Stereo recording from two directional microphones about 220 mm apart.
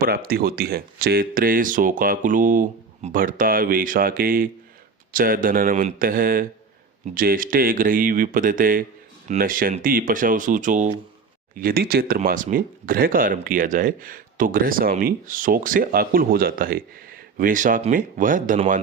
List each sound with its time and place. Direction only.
0.0 s speech: 40° right (ahead or behind)